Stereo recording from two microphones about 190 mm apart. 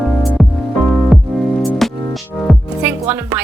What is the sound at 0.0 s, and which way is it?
Music, centre (ahead or behind).